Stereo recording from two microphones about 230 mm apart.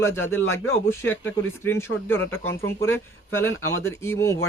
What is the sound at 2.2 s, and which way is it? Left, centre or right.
Speech, left.